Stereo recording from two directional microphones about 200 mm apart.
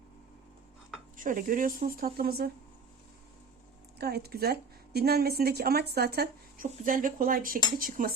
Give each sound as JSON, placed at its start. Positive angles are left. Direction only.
{"t": 1.1, "sound": "a woman's voice", "side_deg": -40}
{"t": 3.9, "sound": "a woman's voice", "side_deg": -50}